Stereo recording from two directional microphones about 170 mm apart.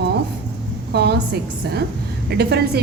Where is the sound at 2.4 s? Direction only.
70° right (ahead or behind).